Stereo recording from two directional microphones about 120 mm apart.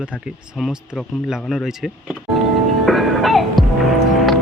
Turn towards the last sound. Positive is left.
turn(degrees=0)  # may be behind; listen again after turning